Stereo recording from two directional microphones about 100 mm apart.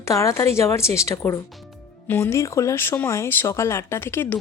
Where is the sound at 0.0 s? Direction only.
30° left (ahead or behind).